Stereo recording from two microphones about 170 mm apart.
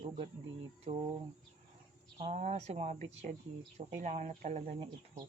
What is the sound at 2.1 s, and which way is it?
Music, 40° right (ahead or behind).